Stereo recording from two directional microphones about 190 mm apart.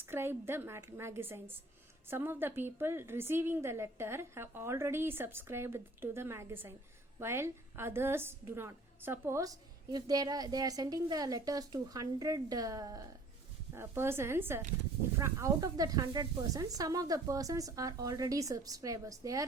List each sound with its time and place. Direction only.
0.0 s a woman's voice: 10° right (ahead or behind)